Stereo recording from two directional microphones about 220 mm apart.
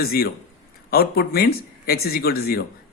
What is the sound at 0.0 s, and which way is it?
Speech, 45° left (ahead or behind).